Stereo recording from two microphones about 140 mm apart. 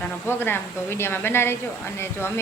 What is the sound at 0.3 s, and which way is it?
A woman's voice, 15° left (ahead or behind).